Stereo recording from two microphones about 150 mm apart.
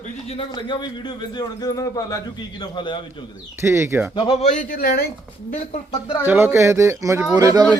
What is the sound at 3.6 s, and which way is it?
Speech, 15° right (ahead or behind).